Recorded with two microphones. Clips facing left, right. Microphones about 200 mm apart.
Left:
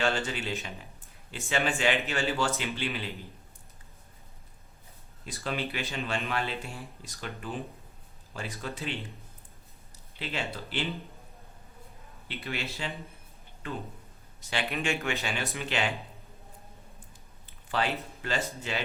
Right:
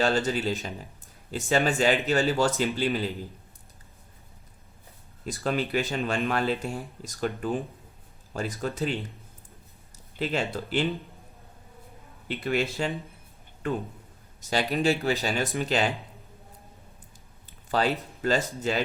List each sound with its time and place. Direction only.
0.0 s speech: 40° right (ahead or behind)
5.2 s speech: 45° right (ahead or behind)
10.2 s speech: 45° right (ahead or behind)
12.5 s speech: 45° right (ahead or behind)
14.5 s speech: 35° right (ahead or behind)
17.7 s speech: 40° right (ahead or behind)